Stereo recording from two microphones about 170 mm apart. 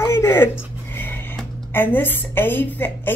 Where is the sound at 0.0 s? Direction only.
15° left (ahead or behind).